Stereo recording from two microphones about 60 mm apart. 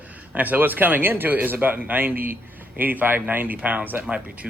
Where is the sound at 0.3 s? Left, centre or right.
Right.